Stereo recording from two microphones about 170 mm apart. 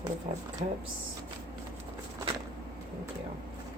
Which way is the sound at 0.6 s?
35° right (ahead or behind).